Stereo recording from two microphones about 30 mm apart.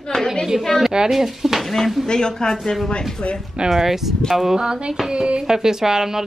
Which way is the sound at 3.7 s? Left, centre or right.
Centre.